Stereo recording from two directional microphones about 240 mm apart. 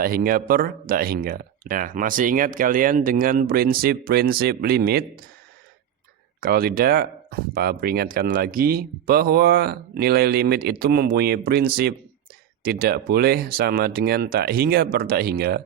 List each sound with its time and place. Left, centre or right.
0.0 s speech: right
6.4 s speech: right